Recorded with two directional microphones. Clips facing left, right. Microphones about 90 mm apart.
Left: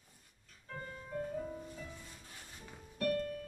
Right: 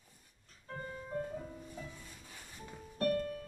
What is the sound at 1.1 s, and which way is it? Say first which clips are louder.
Music: right 1 dB; 35° right (ahead or behind).